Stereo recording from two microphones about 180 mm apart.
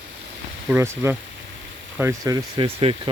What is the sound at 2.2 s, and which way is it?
Speech, 25° right (ahead or behind).